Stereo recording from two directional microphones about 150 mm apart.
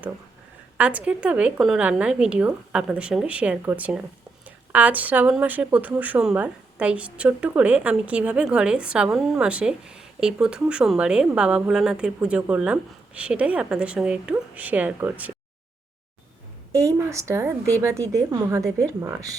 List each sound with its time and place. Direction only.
0.8 s speech: 10° right (ahead or behind)
16.7 s a woman's voice: 20° right (ahead or behind)